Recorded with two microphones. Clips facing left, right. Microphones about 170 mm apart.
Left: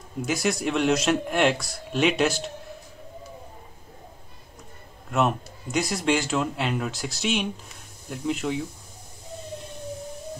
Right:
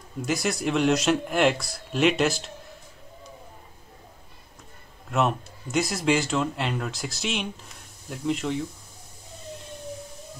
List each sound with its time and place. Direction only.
0.2 s speech: centre (ahead or behind)
5.1 s speech: centre (ahead or behind)